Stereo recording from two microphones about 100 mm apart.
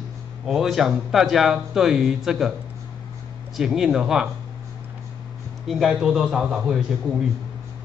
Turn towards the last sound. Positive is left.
turn(degrees=-5)  # may be behind; listen again after turning